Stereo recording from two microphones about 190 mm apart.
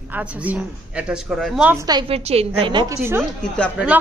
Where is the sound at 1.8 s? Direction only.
20° right (ahead or behind).